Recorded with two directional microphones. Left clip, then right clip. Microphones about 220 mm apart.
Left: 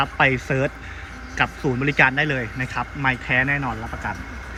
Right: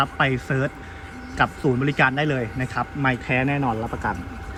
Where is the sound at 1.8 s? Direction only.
Centre (ahead or behind).